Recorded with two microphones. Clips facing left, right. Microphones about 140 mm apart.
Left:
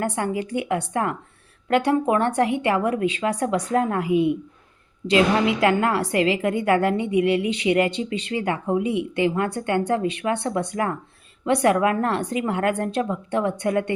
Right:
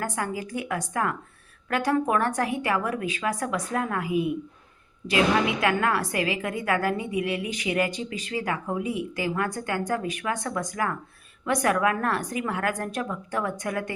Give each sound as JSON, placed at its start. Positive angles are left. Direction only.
{"t": 0.2, "sound": "a woman's voice", "side_deg": 30}